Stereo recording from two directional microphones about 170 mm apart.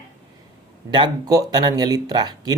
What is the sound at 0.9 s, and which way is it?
Speech, 25° right (ahead or behind).